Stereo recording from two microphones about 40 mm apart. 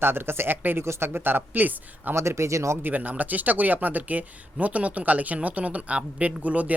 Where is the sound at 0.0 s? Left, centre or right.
Right.